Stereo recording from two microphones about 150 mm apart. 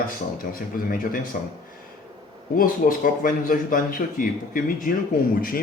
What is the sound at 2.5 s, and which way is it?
Speech, 65° left (ahead or behind).